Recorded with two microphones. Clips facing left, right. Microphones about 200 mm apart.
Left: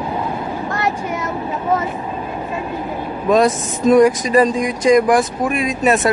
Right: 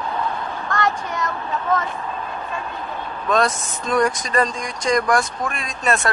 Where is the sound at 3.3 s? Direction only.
5° left (ahead or behind).